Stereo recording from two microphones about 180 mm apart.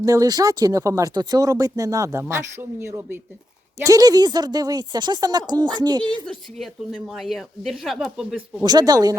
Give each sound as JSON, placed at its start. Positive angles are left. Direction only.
{"t": 0.0, "sound": "speech", "side_deg": -20}
{"t": 6.2, "sound": "a woman's voice", "side_deg": 0}
{"t": 8.6, "sound": "speech", "side_deg": -20}